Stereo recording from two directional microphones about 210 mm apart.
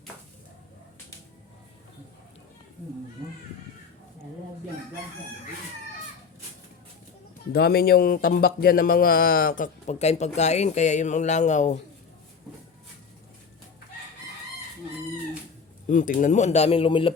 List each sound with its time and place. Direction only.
7.5 s speech: 50° left (ahead or behind)
15.9 s speech: 40° left (ahead or behind)